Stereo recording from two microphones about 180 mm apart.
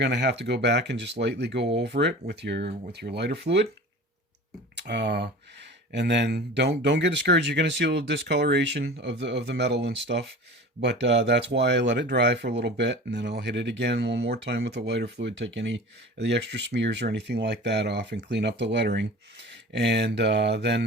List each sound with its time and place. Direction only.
0.0 s speech: 70° right (ahead or behind)
4.7 s speech: 70° right (ahead or behind)